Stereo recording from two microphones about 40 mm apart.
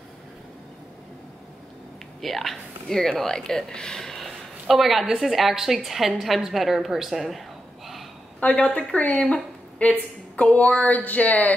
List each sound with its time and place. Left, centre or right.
2.2 s speech: centre
8.5 s a woman's voice: left